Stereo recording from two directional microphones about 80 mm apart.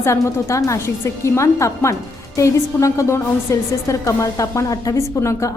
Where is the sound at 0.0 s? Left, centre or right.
Left.